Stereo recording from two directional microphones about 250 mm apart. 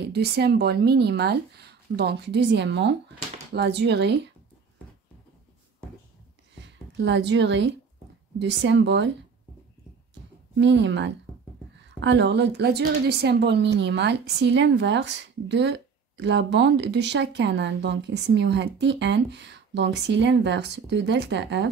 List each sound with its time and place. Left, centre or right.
0.1 s a woman's voice: right
6.6 s a woman's voice: right
10.5 s a woman's voice: right